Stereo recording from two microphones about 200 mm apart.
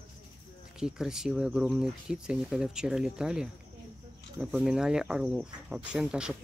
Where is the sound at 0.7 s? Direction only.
5° right (ahead or behind).